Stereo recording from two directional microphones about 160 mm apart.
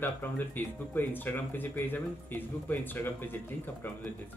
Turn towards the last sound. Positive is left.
turn(degrees=10)  # may be behind; listen again after turning